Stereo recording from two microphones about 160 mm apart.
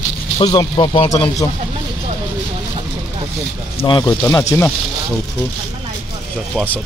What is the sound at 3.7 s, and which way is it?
Speech, 30° left (ahead or behind).